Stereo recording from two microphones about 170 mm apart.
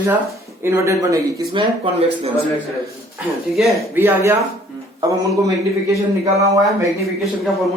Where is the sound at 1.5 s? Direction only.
35° right (ahead or behind).